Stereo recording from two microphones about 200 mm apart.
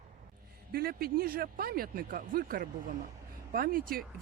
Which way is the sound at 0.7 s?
50° right (ahead or behind).